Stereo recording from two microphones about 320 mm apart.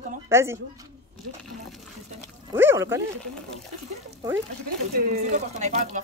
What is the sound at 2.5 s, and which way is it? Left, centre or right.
Speech, centre.